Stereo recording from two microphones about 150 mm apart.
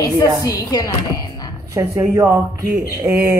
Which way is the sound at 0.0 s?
25° left (ahead or behind).